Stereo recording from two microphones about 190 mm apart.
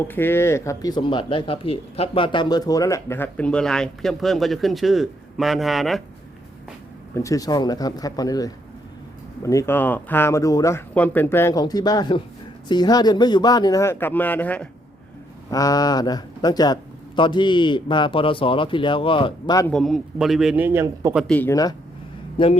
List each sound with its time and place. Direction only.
0.1 s speech: 10° left (ahead or behind)
7.1 s a man's voice: 15° left (ahead or behind)
15.4 s a man's voice: 20° left (ahead or behind)
19.6 s speech: centre (ahead or behind)
21.2 s a man's voice: 10° left (ahead or behind); by 22.5 s 25° left (ahead or behind)